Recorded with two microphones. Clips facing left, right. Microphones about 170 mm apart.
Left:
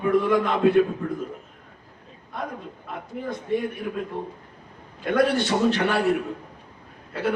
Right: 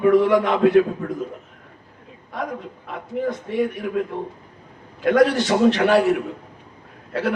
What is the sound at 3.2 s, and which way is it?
Speech, 75° right (ahead or behind).